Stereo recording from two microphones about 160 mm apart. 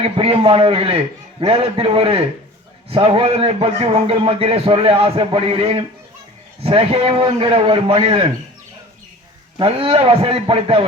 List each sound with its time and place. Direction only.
0.0 s a man's voice: 35° right (ahead or behind)
9.6 s a man's voice: 35° right (ahead or behind)